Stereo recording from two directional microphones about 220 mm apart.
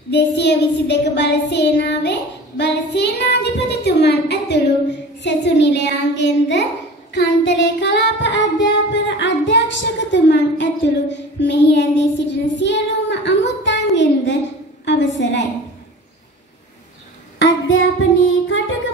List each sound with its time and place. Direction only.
0.1 s child singing: 50° left (ahead or behind)
5.2 s a child's voice: 50° left (ahead or behind)
17.4 s singing: 60° left (ahead or behind)